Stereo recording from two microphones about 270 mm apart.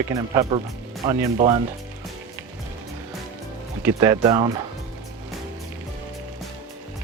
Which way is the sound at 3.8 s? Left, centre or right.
Centre.